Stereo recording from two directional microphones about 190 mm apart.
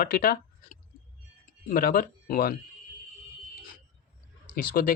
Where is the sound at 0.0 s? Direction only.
50° left (ahead or behind).